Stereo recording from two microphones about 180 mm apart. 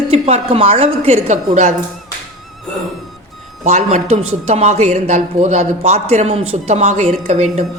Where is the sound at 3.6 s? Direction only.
35° right (ahead or behind).